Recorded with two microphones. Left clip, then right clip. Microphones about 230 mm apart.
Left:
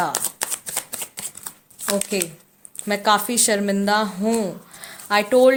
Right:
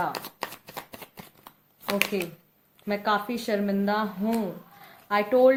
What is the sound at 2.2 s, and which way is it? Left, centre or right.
A woman's voice, left.